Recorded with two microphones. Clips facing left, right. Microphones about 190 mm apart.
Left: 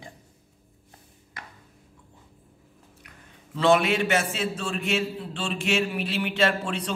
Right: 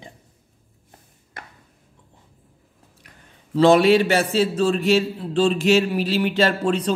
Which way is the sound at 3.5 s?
35° right (ahead or behind).